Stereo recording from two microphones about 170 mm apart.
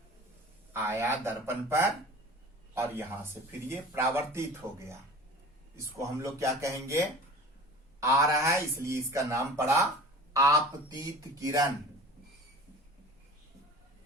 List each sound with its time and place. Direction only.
0.7 s speech: 15° right (ahead or behind)
8.0 s speech: 20° right (ahead or behind)